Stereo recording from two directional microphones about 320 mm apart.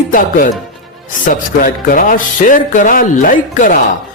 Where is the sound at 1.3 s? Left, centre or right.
Left.